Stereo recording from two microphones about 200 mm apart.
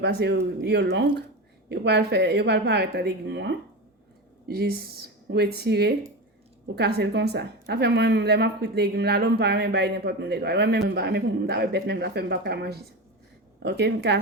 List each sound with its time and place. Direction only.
0.0 s a woman's voice: 55° right (ahead or behind)